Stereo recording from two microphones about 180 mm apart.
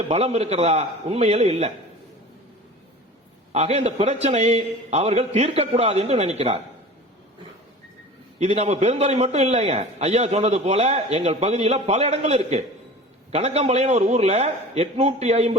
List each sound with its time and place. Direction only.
0.1 s a man's voice: 35° right (ahead or behind)
3.5 s a man's voice: 35° right (ahead or behind)
8.4 s a man's voice: 35° right (ahead or behind)